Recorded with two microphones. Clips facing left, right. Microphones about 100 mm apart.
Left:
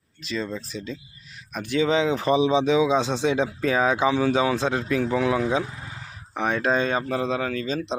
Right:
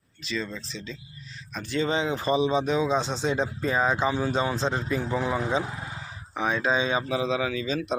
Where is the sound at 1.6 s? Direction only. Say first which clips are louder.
Left 5 dB; 65° left (ahead or behind); by 3.0 s 90° left.